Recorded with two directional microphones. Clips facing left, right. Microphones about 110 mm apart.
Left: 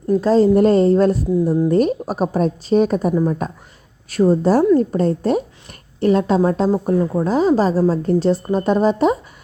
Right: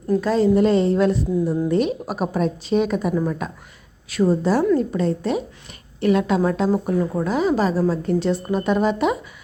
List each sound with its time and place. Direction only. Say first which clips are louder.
0.2 s a woman's voice: left 6 dB; 35° left (ahead or behind)
0.5 s a woman's voice: left 4 dB; 45° left (ahead or behind)